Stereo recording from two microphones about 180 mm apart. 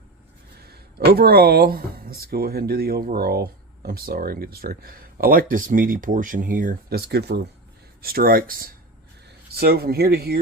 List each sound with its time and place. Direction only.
0.7 s speech: 60° right (ahead or behind)
8.0 s speech: 55° right (ahead or behind)